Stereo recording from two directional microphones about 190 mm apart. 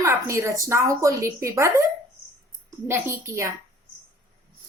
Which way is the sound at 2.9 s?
15° right (ahead or behind).